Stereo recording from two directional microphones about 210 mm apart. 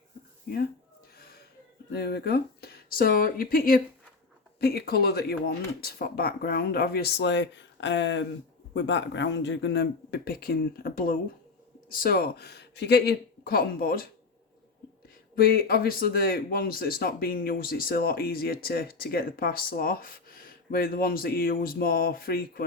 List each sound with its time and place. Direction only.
1.2 s a sound: 45° left (ahead or behind)
1.9 s speech: 50° left (ahead or behind)
15.4 s speech: 45° left (ahead or behind)